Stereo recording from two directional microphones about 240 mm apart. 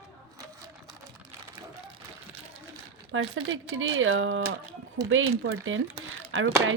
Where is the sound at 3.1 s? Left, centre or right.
Right.